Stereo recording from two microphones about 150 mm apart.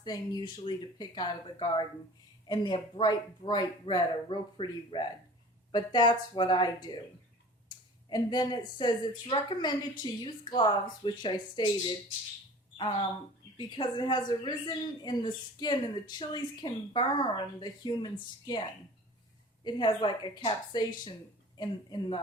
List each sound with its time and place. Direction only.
0.0 s speech: 30° left (ahead or behind)
8.1 s speech: 30° left (ahead or behind)
19.6 s a woman's voice: 30° left (ahead or behind)